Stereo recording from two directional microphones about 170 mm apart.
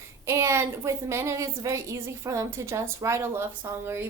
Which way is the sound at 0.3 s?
15° right (ahead or behind).